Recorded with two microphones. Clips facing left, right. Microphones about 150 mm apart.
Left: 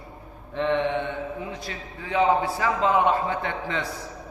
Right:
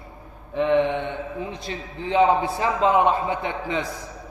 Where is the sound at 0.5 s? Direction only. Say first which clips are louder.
Right 5 dB; 10° right (ahead or behind).